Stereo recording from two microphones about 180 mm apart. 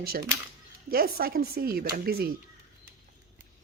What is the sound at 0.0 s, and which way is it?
Speech, 60° right (ahead or behind).